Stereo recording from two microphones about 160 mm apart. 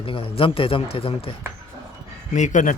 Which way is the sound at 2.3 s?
50° left (ahead or behind).